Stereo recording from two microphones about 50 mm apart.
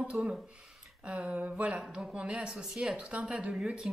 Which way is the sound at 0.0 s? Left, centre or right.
Centre.